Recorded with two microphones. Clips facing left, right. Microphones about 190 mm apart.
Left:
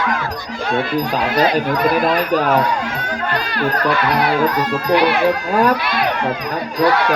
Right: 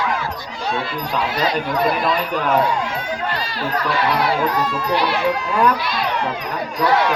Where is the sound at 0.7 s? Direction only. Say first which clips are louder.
Left 6 dB; 60° left (ahead or behind).